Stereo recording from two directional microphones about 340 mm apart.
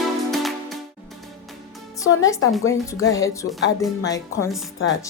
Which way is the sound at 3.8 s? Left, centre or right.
Centre.